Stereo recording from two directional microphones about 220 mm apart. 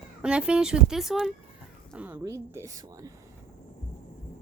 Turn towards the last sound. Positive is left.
turn(degrees=-15)  # may be behind; listen again after turning